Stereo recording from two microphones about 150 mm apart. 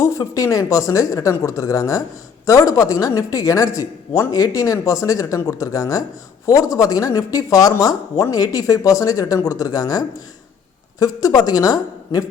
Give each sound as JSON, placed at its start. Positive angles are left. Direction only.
{"t": 0.0, "sound": "speech", "side_deg": 20}